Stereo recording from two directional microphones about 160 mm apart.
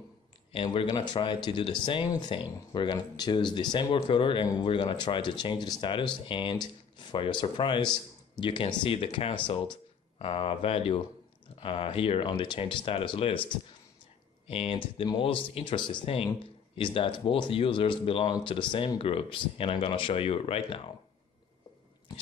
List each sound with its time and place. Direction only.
0.5 s speech: 35° left (ahead or behind)